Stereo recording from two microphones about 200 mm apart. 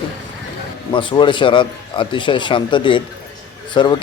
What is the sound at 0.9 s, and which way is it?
A man's voice, 25° left (ahead or behind).